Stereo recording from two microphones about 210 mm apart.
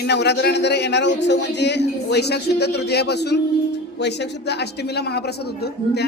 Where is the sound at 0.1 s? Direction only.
55° left (ahead or behind).